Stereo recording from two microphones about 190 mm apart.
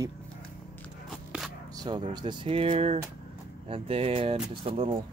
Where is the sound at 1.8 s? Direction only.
20° right (ahead or behind).